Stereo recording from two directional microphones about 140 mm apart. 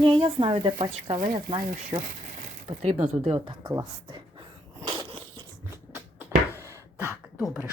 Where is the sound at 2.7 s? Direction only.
50° right (ahead or behind).